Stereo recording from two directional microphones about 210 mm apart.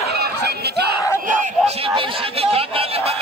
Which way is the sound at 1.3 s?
30° right (ahead or behind).